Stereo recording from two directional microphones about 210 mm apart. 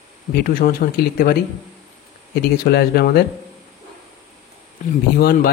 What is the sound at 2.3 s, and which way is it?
Speech, 50° left (ahead or behind).